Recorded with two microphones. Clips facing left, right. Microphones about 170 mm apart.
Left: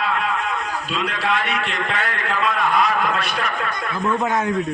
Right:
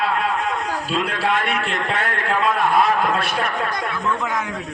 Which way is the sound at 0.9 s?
35° right (ahead or behind).